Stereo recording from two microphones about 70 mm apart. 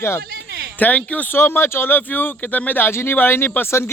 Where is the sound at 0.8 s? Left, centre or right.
Centre.